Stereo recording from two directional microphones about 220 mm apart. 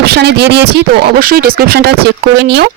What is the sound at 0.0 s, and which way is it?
Speech, 45° right (ahead or behind).